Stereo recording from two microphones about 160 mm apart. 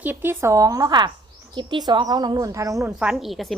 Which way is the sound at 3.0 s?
5° right (ahead or behind).